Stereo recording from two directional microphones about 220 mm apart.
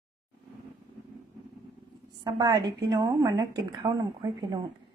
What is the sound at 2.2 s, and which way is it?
A woman's voice, 15° right (ahead or behind).